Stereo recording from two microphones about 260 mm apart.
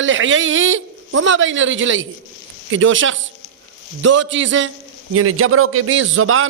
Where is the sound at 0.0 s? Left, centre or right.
Right.